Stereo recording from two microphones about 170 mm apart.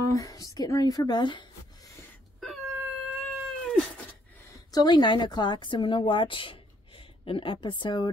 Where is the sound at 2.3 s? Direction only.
Centre (ahead or behind).